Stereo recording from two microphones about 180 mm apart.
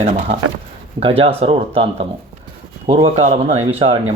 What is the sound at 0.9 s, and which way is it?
Speech, 30° right (ahead or behind).